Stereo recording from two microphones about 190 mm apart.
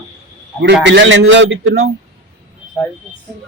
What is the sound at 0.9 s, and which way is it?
A man's voice, 75° right (ahead or behind).